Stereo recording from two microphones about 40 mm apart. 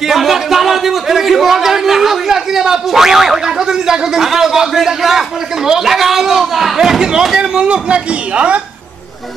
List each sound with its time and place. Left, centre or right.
0.1 s a man's voice: centre
7.6 s a man's voice: right